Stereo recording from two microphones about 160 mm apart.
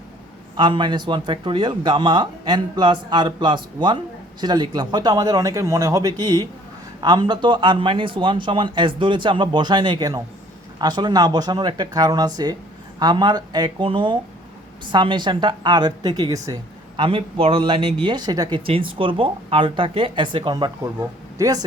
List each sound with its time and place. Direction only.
0.5 s a man's voice: 30° right (ahead or behind)